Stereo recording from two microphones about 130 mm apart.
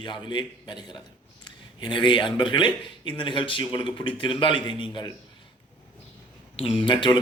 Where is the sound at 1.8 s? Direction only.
35° left (ahead or behind).